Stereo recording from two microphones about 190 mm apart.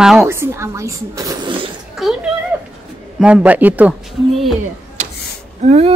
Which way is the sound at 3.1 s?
5° right (ahead or behind).